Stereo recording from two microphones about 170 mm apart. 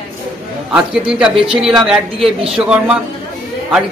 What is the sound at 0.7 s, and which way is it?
A woman's voice, 5° right (ahead or behind).